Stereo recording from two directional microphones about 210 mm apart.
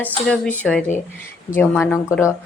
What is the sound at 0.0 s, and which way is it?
Speech, 10° left (ahead or behind).